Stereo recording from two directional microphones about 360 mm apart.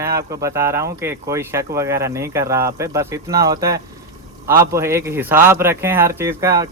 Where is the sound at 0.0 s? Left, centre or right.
Centre.